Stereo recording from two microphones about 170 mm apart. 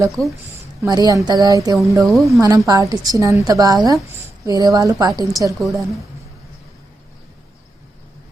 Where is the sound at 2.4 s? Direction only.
20° right (ahead or behind).